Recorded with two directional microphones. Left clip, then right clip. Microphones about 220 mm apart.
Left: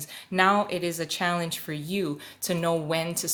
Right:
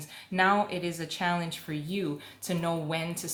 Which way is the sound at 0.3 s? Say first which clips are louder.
Left 3 dB; 45° left (ahead or behind).